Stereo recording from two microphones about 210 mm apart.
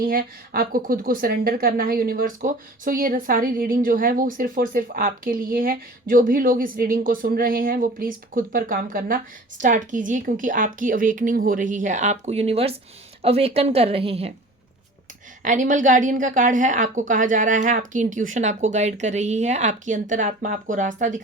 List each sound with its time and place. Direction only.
0.0 s a woman's voice: 45° right (ahead or behind); by 14.3 s 25° right (ahead or behind)
15.4 s speech: 35° right (ahead or behind)